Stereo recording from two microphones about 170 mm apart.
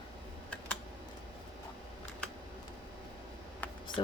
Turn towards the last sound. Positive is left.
turn(degrees=30)  # may be behind; listen again after turning